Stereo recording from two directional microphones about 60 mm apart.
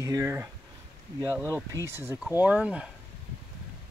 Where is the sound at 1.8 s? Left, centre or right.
Right.